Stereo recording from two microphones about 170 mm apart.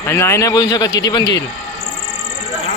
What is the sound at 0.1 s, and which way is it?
Speech, 15° left (ahead or behind).